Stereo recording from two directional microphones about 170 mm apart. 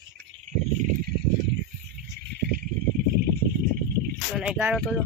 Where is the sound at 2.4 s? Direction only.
65° right (ahead or behind).